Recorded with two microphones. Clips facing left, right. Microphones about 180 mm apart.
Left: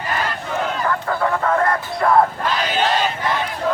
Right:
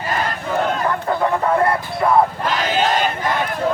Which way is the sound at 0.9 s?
20° right (ahead or behind).